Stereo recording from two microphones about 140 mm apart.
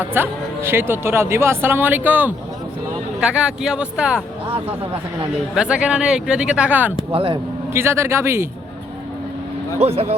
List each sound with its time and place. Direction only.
0.0 s speech: 15° right (ahead or behind)
5.5 s speech: 5° right (ahead or behind)
7.1 s speech: 40° right (ahead or behind)
7.7 s speech: 15° right (ahead or behind)
9.7 s speech: 45° right (ahead or behind)